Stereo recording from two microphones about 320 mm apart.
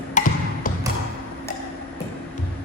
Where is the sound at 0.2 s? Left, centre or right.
Left.